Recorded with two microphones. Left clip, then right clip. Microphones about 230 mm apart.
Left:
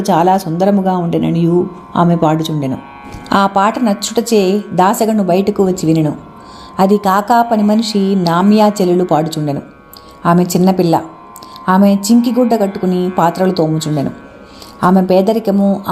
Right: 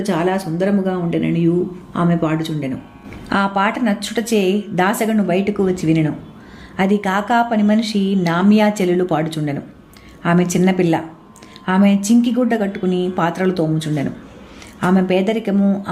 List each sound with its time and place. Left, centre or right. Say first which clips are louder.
0.0 s speech: left 8 dB; left
3.2 s a woman's voice: left 6 dB; centre